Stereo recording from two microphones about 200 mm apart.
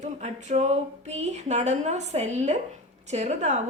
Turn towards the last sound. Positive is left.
turn(degrees=-35)  # may be behind; listen again after turning